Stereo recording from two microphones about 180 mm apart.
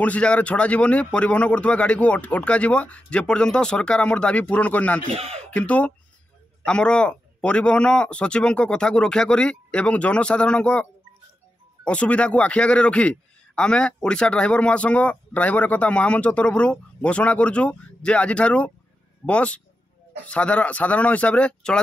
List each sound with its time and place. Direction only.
0.0 s a man's voice: 5° left (ahead or behind)
5.0 s speech: 35° right (ahead or behind)
5.4 s a man's voice: 5° left (ahead or behind)